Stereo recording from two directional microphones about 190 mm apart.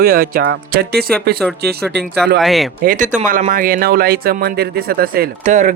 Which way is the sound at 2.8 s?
45° right (ahead or behind).